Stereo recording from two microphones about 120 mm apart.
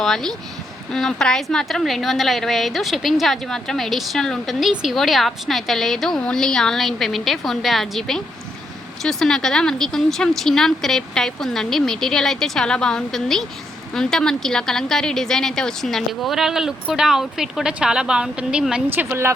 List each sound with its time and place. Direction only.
0.0 s a woman's voice: 5° left (ahead or behind)
18.9 s a woman's voice: 20° right (ahead or behind)